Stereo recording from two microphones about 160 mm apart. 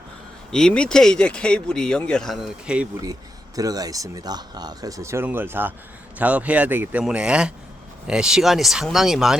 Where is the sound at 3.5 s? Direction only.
20° right (ahead or behind).